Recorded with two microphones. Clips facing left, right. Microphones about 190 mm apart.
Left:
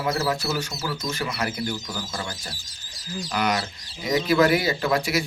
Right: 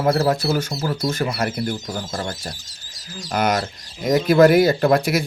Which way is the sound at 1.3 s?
50° right (ahead or behind).